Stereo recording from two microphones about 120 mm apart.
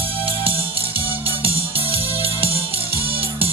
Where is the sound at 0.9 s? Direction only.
50° right (ahead or behind).